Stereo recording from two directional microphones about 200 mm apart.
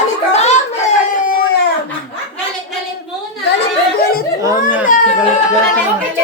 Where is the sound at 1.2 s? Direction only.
45° left (ahead or behind).